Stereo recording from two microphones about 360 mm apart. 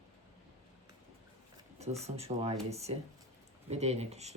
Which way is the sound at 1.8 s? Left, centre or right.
Centre.